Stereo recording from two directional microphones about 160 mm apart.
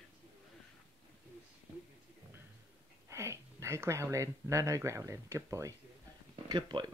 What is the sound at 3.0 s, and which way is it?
Speech, 20° right (ahead or behind).